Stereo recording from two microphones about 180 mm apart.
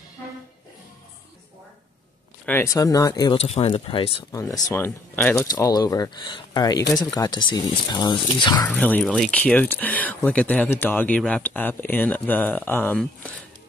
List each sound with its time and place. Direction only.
2.4 s speech: 10° left (ahead or behind)
3.3 s speech: 35° left (ahead or behind)
4.3 s speech: 20° left (ahead or behind)
8.6 s speech: 10° left (ahead or behind)